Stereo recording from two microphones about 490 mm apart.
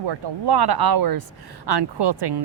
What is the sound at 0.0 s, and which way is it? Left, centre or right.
Speech, right.